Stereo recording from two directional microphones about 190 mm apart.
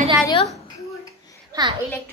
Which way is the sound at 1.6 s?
20° right (ahead or behind).